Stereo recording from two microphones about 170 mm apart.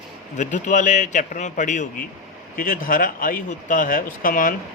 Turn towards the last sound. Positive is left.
turn(degrees=55)  # may be behind; listen again after turning